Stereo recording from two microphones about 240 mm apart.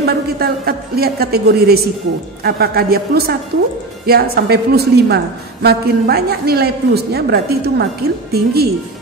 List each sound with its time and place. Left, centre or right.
0.0 s a woman's voice: right